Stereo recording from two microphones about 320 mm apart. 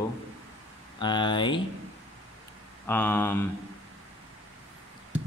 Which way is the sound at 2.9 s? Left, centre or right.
Centre.